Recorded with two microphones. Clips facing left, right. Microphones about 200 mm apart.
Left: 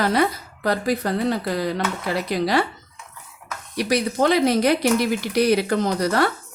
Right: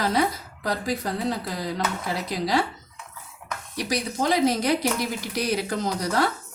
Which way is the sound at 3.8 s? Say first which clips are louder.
Left 7 dB; 65° left (ahead or behind).